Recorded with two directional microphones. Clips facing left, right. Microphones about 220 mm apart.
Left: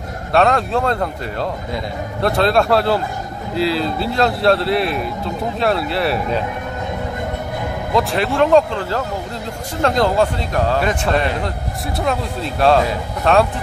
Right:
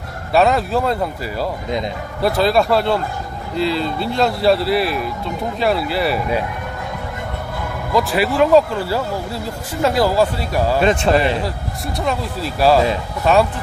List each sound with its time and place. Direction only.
0.3 s speech: 5° right (ahead or behind)
7.9 s speech: centre (ahead or behind)
11.1 s a man's voice: 25° right (ahead or behind)
12.0 s speech: centre (ahead or behind)